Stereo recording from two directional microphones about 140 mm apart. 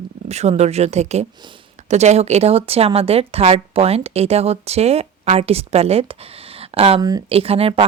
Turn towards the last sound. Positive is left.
turn(degrees=-45)  # may be behind; listen again after turning